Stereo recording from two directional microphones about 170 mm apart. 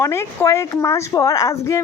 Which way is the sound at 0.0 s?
15° left (ahead or behind).